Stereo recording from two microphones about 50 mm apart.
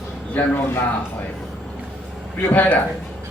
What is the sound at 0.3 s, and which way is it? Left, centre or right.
Speech, left.